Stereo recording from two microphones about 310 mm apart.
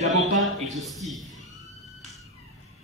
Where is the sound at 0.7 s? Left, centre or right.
Centre.